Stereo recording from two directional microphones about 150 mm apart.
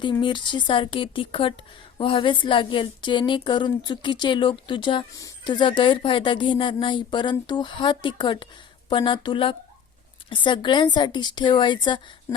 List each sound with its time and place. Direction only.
0.0 s a woman's voice: 30° left (ahead or behind)